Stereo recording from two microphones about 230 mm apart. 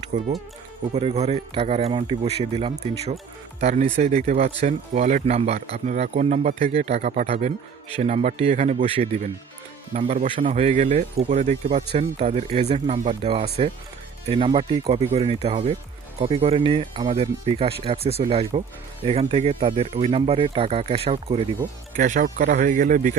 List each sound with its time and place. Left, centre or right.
0.1 s speech: right